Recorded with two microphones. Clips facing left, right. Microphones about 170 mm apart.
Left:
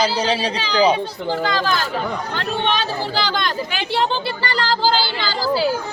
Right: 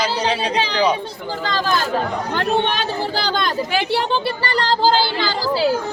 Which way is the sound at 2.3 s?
50° right (ahead or behind).